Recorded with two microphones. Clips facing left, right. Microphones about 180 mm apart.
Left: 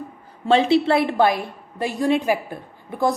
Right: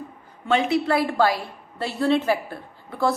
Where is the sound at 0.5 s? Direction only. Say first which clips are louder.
Left 4 dB; 30° left (ahead or behind).